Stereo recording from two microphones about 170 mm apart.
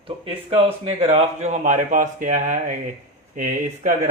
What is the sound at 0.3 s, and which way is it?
Speech, 35° right (ahead or behind).